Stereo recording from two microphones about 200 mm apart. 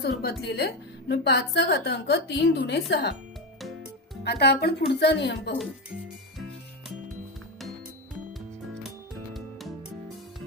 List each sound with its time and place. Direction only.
0.0 s a woman's voice: 55° left (ahead or behind)
4.2 s a woman's voice: 55° left (ahead or behind)
9.3 s music: centre (ahead or behind)